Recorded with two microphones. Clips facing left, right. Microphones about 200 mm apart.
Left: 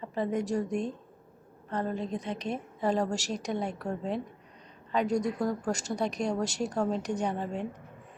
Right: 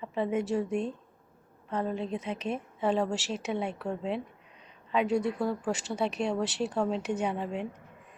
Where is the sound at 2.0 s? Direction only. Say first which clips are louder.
Even; 35° left (ahead or behind).